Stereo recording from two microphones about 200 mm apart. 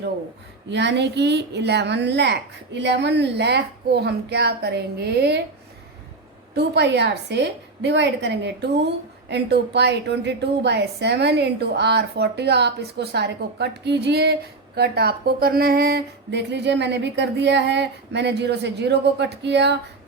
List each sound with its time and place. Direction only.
0.7 s a woman's voice: 60° right (ahead or behind)
6.5 s a woman's voice: 60° right (ahead or behind)